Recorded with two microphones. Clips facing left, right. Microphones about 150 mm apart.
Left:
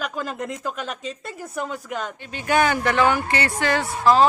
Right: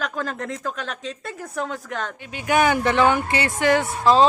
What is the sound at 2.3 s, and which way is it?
Speech, 10° right (ahead or behind).